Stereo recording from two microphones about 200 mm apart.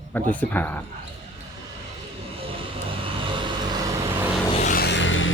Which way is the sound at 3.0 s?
25° right (ahead or behind).